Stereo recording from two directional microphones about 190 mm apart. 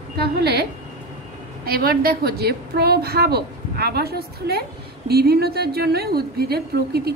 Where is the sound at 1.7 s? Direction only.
55° right (ahead or behind).